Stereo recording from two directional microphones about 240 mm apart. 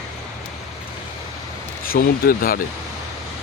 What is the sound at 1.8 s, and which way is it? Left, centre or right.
Speech, left.